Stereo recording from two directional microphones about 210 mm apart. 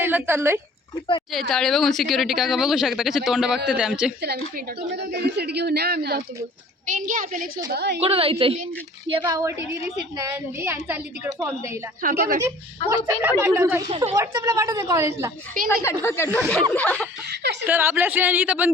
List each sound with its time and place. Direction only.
0.0 s speech: 10° right (ahead or behind)
1.3 s a woman's voice: centre (ahead or behind)
4.5 s a woman's voice: 50° right (ahead or behind)
6.8 s a woman's voice: 40° right (ahead or behind)
7.7 s a woman's voice: 50° right (ahead or behind)
8.0 s a woman's voice: 25° right (ahead or behind)
12.0 s a woman's voice: 40° right (ahead or behind)
12.4 s a woman's voice: 15° right (ahead or behind)
15.7 s a woman's voice: 10° left (ahead or behind)
17.2 s a woman's voice: 55° right (ahead or behind)
17.7 s a woman's voice: 10° right (ahead or behind)